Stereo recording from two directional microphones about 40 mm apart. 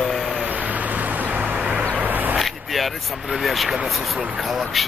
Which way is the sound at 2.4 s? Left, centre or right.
Centre.